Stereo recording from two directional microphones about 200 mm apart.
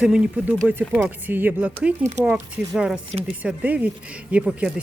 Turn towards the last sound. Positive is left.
turn(degrees=-5)  # may be behind; listen again after turning